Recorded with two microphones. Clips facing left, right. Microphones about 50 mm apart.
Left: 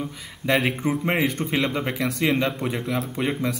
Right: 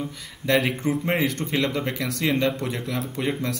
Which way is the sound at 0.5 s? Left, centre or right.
Centre.